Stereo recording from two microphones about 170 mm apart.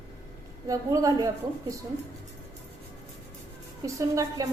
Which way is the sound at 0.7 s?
20° right (ahead or behind).